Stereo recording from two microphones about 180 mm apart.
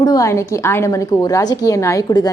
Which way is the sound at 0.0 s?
20° left (ahead or behind).